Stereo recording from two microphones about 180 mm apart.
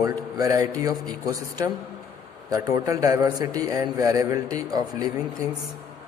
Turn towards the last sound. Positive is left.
turn(degrees=-20)  # may be behind; listen again after turning